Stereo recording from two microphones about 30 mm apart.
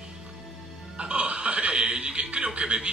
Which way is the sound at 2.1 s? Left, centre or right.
Right.